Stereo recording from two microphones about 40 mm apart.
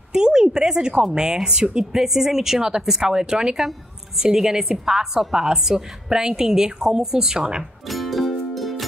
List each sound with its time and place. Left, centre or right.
0.1 s a sound: centre
1.1 s a woman's voice: centre
7.9 s music: centre